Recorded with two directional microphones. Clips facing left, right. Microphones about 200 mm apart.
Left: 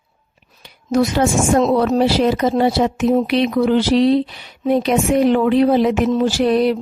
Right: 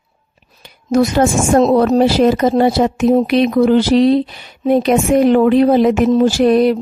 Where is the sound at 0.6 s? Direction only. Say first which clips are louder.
Right 3 dB; 45° right (ahead or behind).